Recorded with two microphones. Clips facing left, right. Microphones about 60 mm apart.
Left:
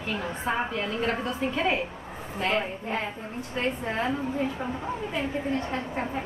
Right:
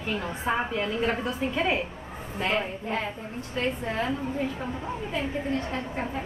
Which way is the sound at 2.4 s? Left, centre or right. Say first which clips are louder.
Even; centre.